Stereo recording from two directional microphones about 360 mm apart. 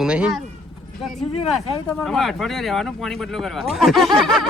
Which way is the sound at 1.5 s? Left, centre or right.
Centre.